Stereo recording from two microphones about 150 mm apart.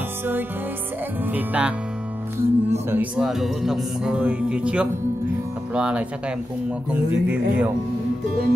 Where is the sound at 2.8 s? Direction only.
15° right (ahead or behind).